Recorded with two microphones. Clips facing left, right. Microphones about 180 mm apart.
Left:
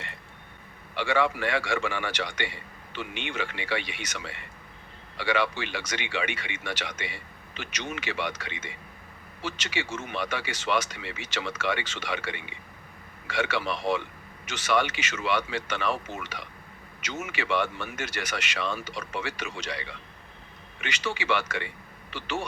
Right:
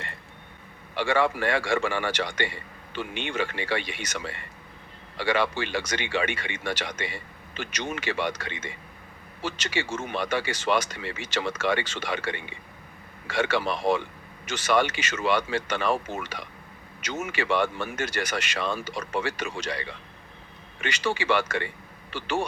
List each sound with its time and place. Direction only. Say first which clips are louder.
0.9 s speech: right 2 dB; 45° right (ahead or behind)
20.8 s speech: right 4 dB; 35° right (ahead or behind)